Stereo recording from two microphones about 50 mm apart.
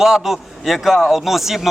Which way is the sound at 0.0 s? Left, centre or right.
Centre.